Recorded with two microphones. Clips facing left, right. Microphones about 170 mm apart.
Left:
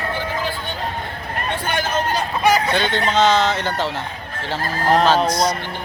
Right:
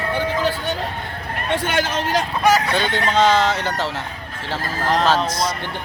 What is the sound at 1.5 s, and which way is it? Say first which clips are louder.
Speech: right 3 dB; 90° right.